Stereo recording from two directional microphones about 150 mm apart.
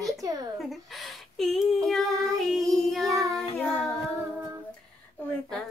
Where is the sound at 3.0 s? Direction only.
20° right (ahead or behind).